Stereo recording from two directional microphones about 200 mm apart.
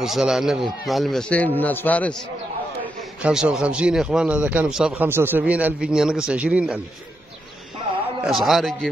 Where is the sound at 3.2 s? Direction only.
5° right (ahead or behind).